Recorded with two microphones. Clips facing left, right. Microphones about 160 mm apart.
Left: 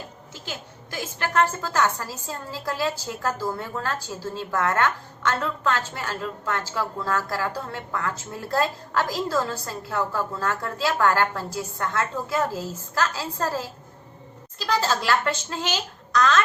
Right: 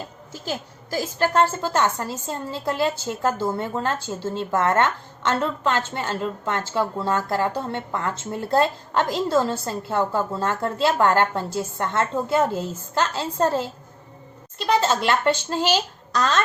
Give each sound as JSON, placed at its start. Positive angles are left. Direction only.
{"t": 0.9, "sound": "a woman's voice", "side_deg": -35}
{"t": 14.7, "sound": "a woman's voice", "side_deg": -25}